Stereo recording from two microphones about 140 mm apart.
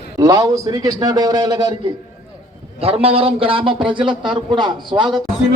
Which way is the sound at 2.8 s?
45° right (ahead or behind).